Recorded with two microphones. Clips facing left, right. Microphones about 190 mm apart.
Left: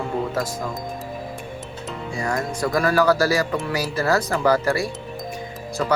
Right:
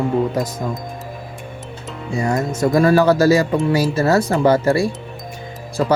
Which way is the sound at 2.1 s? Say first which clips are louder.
Right 6 dB; 25° right (ahead or behind).